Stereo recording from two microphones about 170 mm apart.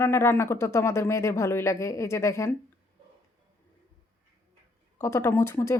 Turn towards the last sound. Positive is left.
turn(degrees=15)  # may be behind; listen again after turning